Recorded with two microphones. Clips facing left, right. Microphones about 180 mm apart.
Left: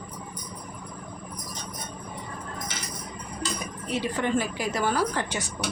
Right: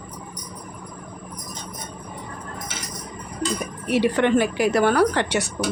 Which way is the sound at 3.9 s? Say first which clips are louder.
Right 8 dB; 75° right (ahead or behind).